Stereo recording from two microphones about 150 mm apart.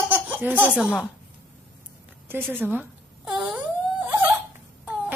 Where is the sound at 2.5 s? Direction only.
15° right (ahead or behind).